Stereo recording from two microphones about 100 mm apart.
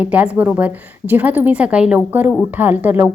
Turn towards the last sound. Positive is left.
turn(degrees=-15)  # may be behind; listen again after turning